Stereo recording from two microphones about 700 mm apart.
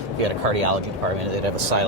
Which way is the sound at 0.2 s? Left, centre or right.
Right.